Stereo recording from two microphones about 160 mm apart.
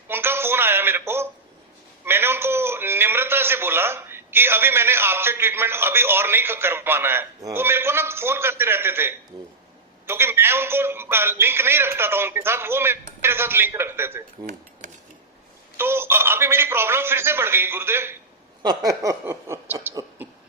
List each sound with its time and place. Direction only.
0.1 s a sound: 15° right (ahead or behind)
2.0 s a man's voice: 15° right (ahead or behind)
14.8 s cutlery: 50° right (ahead or behind)
15.8 s a man's voice: 15° right (ahead or behind)
19.9 s cough: 20° right (ahead or behind)